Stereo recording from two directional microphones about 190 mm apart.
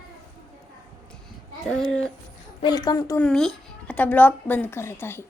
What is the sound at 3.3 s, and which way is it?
A woman's voice, 5° left (ahead or behind).